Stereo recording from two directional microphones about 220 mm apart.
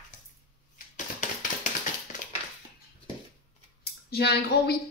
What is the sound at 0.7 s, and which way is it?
Typewriter, 35° left (ahead or behind).